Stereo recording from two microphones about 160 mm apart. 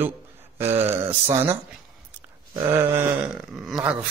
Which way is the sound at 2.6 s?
15° right (ahead or behind).